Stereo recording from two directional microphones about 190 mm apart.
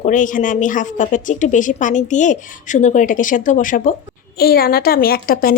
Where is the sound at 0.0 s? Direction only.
45° left (ahead or behind).